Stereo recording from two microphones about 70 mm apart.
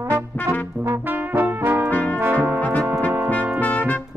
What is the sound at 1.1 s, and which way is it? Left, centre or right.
Brass instrument, right.